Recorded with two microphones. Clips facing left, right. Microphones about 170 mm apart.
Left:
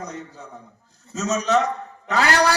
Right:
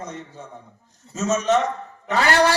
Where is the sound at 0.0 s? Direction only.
40° left (ahead or behind).